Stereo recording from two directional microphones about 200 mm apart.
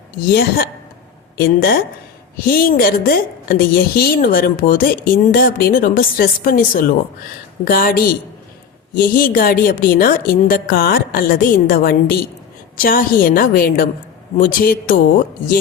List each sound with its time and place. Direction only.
0.3 s a woman's voice: 50° left (ahead or behind)